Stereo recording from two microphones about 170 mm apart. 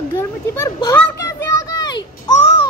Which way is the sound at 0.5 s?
15° left (ahead or behind).